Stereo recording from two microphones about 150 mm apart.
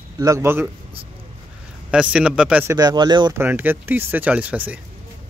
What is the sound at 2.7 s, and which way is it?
Speech, 25° right (ahead or behind).